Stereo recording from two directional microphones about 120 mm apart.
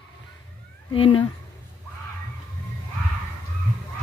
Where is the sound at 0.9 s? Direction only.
45° left (ahead or behind).